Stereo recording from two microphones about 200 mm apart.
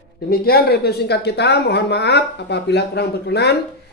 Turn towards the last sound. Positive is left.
turn(degrees=55)  # may be behind; listen again after turning